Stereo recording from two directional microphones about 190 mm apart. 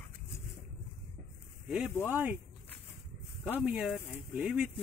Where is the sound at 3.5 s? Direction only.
5° right (ahead or behind).